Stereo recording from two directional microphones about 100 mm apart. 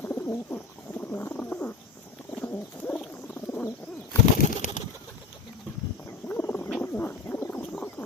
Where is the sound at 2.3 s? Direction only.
20° left (ahead or behind).